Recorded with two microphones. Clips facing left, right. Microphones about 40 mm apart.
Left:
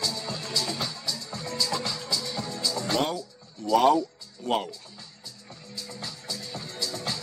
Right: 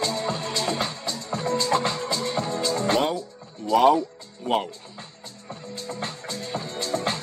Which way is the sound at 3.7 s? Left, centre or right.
Centre.